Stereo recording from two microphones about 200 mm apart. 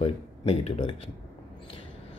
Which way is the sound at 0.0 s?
30° left (ahead or behind).